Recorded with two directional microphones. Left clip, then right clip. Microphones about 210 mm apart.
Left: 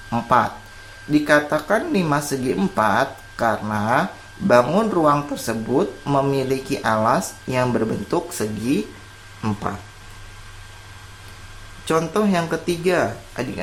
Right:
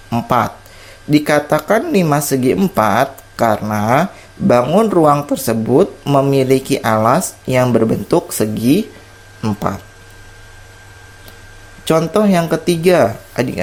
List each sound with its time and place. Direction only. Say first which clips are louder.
0.1 s speech: right 3 dB; 15° right (ahead or behind)
1.1 s speech: right 4 dB; 30° right (ahead or behind)
11.9 s speech: right 7 dB; 30° right (ahead or behind)